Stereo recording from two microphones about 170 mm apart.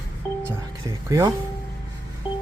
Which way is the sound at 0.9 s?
20° right (ahead or behind).